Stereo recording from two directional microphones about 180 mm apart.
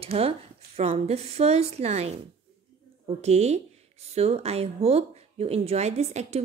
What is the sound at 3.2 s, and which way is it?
Speech, 40° right (ahead or behind).